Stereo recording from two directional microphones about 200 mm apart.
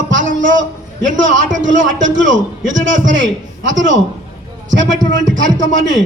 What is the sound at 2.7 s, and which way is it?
A man's voice, 70° right (ahead or behind).